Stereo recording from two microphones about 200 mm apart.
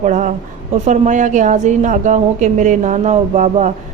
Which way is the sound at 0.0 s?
40° right (ahead or behind).